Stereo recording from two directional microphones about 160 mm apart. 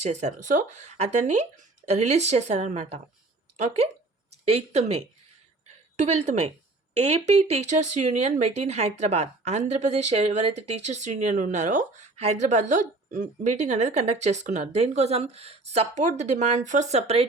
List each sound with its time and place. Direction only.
0.0 s speech: 45° right (ahead or behind)
4.5 s speech: 40° right (ahead or behind)